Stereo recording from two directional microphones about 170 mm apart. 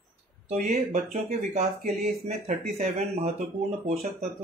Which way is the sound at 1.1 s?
45° right (ahead or behind).